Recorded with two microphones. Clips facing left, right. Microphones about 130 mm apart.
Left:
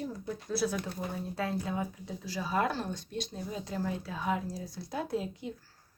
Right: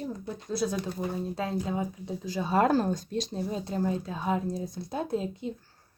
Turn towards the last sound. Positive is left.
turn(degrees=-25)  # may be behind; listen again after turning